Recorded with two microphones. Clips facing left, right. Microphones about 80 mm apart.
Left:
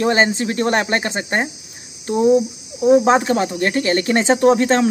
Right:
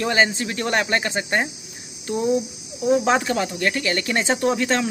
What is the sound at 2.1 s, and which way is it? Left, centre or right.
Cricket, left.